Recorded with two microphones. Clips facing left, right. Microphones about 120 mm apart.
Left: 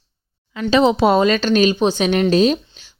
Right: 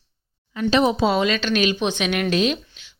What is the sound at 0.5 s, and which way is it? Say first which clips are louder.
Speech: left 4 dB; 90° left.